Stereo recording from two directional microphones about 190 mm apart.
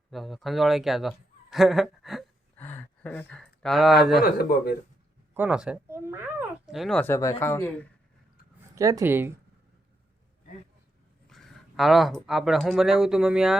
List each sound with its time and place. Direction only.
0.1 s speech: centre (ahead or behind)
4.2 s speech: 50° left (ahead or behind)
5.3 s cat: 10° right (ahead or behind)
7.0 s speech: 15° left (ahead or behind)
8.7 s speech: 15° right (ahead or behind)
11.3 s speech: centre (ahead or behind)